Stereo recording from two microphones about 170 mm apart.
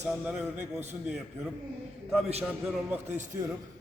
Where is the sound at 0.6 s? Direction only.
40° right (ahead or behind).